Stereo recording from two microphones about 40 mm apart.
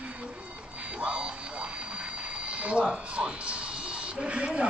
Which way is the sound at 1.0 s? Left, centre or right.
Right.